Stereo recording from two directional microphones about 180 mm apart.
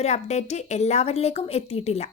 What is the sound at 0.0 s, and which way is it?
A woman's voice, 40° left (ahead or behind).